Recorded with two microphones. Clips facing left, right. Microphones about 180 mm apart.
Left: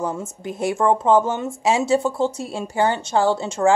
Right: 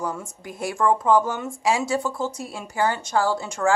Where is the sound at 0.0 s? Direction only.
25° left (ahead or behind).